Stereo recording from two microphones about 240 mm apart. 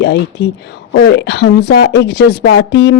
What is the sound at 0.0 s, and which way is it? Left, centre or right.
Speech, left.